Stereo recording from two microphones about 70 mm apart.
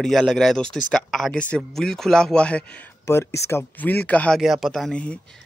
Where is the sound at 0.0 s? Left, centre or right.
Centre.